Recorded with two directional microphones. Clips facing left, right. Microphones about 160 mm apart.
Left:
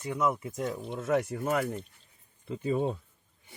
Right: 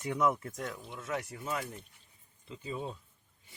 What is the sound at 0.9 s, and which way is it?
Speech, 55° left (ahead or behind).